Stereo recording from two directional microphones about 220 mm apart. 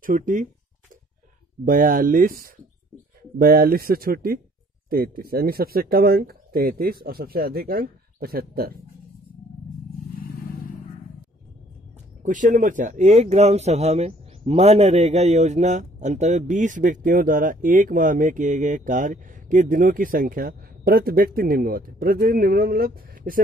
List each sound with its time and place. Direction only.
0.0 s a man's voice: 35° right (ahead or behind)
1.6 s a man's voice: 40° right (ahead or behind)
12.2 s a man's voice: 35° right (ahead or behind)